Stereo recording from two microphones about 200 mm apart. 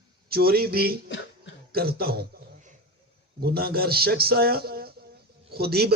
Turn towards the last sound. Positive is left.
turn(degrees=-50)  # may be behind; listen again after turning